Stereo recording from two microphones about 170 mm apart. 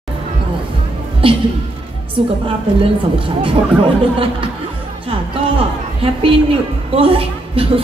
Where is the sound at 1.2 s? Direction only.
30° right (ahead or behind).